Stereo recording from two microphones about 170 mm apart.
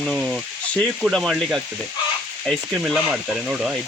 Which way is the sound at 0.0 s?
Centre (ahead or behind).